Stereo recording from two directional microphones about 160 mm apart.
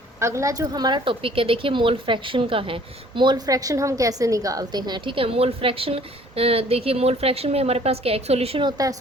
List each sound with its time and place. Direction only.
0.2 s a woman's voice: 15° right (ahead or behind); by 8.7 s 35° right (ahead or behind)